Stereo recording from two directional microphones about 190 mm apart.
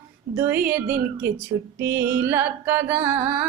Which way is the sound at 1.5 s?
20° right (ahead or behind).